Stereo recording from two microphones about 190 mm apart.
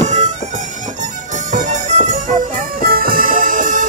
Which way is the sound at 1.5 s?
40° right (ahead or behind).